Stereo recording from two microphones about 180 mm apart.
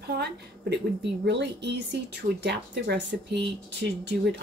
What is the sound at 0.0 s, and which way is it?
A woman's voice, 65° right (ahead or behind).